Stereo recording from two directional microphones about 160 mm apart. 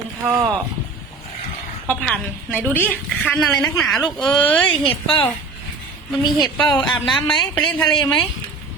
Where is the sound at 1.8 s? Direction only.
5° left (ahead or behind).